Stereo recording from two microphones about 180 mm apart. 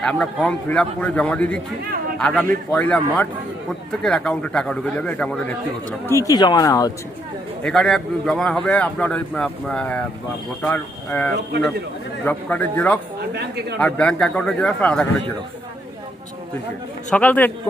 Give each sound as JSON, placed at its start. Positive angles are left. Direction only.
{"t": 0.0, "sound": "a man's voice", "side_deg": 5}
{"t": 6.1, "sound": "speech", "side_deg": 20}
{"t": 7.6, "sound": "a man's voice", "side_deg": 0}
{"t": 17.1, "sound": "a man's voice", "side_deg": 10}